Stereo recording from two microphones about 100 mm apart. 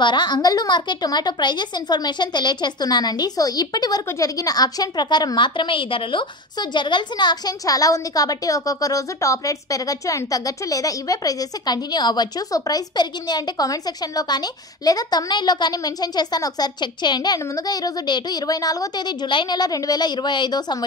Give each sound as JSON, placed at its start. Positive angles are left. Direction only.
{"t": 0.0, "sound": "a woman's voice", "side_deg": 50}